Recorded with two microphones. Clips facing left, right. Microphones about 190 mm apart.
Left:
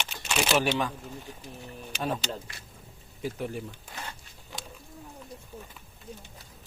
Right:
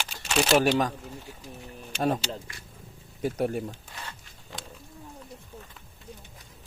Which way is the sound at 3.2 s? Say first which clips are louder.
Right 6 dB; 50° right (ahead or behind).